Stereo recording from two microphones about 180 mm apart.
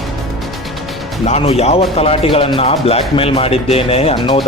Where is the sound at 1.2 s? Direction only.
35° left (ahead or behind).